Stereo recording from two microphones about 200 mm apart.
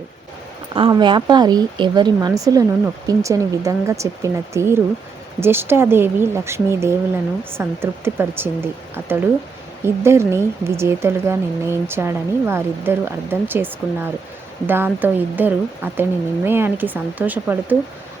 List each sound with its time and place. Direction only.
0.7 s speech: 20° right (ahead or behind)